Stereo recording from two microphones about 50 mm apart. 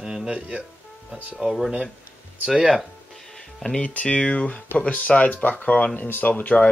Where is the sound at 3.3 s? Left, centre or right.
Centre.